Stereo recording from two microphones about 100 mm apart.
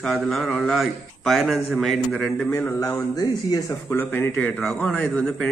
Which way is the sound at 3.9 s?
20° left (ahead or behind).